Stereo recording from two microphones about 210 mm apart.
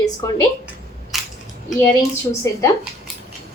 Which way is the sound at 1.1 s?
Centre (ahead or behind).